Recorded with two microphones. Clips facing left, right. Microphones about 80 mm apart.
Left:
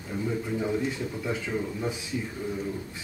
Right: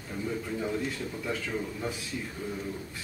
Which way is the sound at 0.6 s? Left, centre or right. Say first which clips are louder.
Left 4 dB; centre.